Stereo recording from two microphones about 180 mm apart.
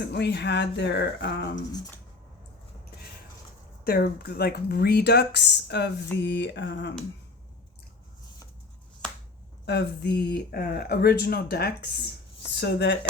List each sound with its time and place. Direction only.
0.0 s speech: 70° left (ahead or behind)
3.8 s speech: 60° left (ahead or behind); by 6.9 s 75° left (ahead or behind)
9.6 s speech: 65° left (ahead or behind)